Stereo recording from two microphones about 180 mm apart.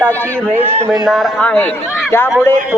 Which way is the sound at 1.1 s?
5° left (ahead or behind).